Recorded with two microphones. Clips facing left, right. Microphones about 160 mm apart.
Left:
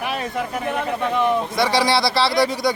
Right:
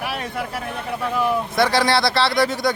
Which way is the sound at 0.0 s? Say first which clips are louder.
Left 2 dB; 5° right (ahead or behind).